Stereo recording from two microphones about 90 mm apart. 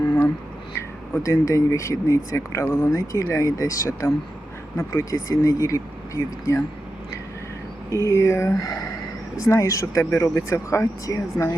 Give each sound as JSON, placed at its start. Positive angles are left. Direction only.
{"t": 1.1, "sound": "speech", "side_deg": 35}
{"t": 8.0, "sound": "speech", "side_deg": 30}